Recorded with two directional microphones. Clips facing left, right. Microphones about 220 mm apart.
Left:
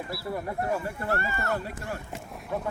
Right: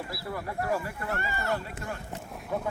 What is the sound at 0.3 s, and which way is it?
Speech, 25° left (ahead or behind).